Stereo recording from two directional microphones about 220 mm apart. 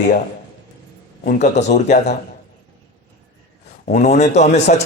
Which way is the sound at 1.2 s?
35° left (ahead or behind).